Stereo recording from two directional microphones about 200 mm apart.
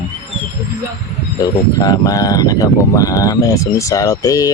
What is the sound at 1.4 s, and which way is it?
Speech, 20° left (ahead or behind).